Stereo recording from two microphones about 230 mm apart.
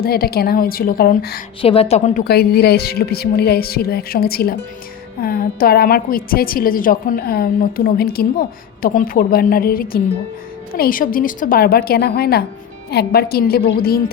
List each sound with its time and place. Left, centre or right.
0.0 s a woman's voice: left
1.6 s a woman's voice: left